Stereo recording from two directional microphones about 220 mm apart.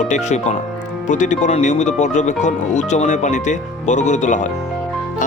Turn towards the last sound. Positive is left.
turn(degrees=35)  # may be behind; listen again after turning